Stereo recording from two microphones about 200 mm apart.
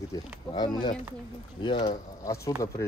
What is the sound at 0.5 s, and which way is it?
Speech, 20° left (ahead or behind).